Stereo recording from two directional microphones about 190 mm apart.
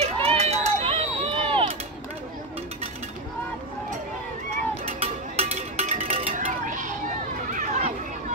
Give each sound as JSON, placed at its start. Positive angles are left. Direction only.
{"t": 0.0, "sound": "run", "side_deg": -35}
{"t": 4.8, "sound": "music", "side_deg": -30}
{"t": 7.4, "sound": "run", "side_deg": -40}